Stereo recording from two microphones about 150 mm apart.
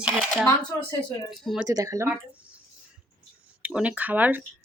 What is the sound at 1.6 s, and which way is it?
Speech, 20° right (ahead or behind).